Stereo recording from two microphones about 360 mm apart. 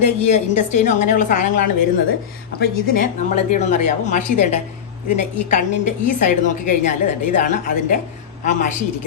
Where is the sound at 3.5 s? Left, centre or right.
Centre.